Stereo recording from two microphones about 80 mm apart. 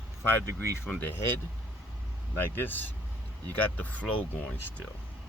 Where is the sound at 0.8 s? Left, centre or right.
Left.